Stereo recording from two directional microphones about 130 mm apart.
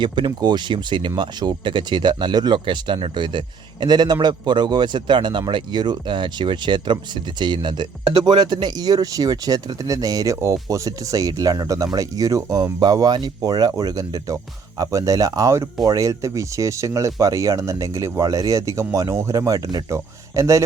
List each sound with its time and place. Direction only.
0.0 s speech: 35° right (ahead or behind)